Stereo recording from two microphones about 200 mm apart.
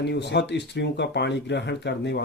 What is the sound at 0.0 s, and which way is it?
Speech, 60° left (ahead or behind).